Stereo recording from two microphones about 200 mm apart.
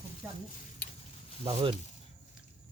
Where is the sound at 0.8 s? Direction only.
50° left (ahead or behind).